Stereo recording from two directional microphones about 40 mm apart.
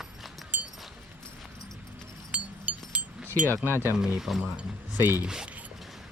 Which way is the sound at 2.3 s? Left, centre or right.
Right.